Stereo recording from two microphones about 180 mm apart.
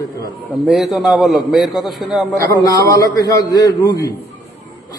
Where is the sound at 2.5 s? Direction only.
20° left (ahead or behind).